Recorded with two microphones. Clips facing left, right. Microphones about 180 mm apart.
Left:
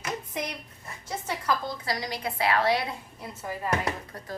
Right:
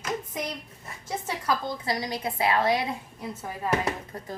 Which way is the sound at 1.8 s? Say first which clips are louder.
Right 3 dB; 20° right (ahead or behind).